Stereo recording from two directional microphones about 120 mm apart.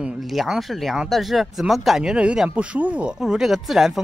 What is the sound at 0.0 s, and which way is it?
Speech, centre (ahead or behind).